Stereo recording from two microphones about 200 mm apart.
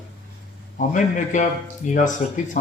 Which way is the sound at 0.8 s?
40° left (ahead or behind).